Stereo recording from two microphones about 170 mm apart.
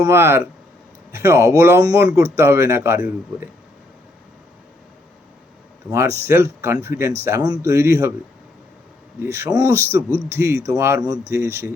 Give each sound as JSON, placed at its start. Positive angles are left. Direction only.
{"t": 0.0, "sound": "speech", "side_deg": -15}
{"t": 5.9, "sound": "speech", "side_deg": -15}
{"t": 9.3, "sound": "speech", "side_deg": -15}